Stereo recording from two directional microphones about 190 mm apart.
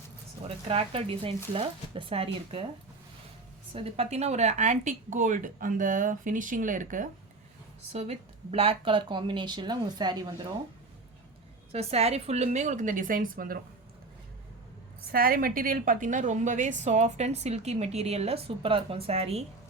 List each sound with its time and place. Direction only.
0.4 s a woman's voice: 30° right (ahead or behind)
3.8 s speech: 30° right (ahead or behind)
7.9 s speech: 30° right (ahead or behind)
11.7 s a woman's voice: 35° right (ahead or behind)
15.1 s a woman's voice: 50° right (ahead or behind); by 19.5 s 35° right (ahead or behind)